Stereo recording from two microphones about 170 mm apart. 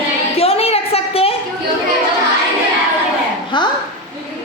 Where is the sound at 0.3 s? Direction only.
35° left (ahead or behind).